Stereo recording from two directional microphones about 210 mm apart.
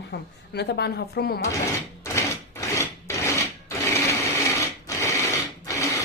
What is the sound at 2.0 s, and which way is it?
Filing, 15° left (ahead or behind).